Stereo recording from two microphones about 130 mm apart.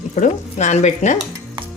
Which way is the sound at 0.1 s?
65° left (ahead or behind).